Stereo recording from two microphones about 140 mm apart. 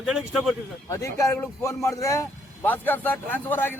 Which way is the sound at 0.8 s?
20° left (ahead or behind).